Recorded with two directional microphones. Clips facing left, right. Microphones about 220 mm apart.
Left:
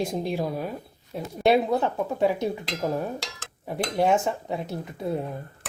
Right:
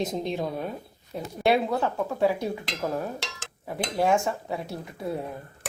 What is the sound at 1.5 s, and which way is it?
Speech, 15° left (ahead or behind).